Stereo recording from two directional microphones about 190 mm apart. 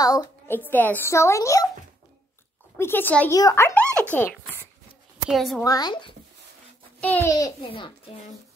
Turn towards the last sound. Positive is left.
turn(degrees=25)  # may be behind; listen again after turning